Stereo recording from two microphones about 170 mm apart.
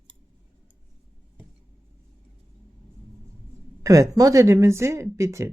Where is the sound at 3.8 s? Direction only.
20° right (ahead or behind).